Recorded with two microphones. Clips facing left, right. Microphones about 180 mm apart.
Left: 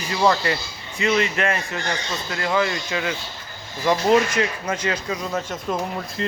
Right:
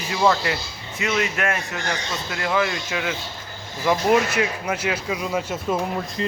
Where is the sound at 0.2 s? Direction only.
Centre (ahead or behind).